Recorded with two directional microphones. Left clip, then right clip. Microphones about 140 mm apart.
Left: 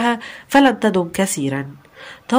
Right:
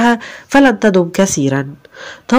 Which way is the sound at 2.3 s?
30° right (ahead or behind).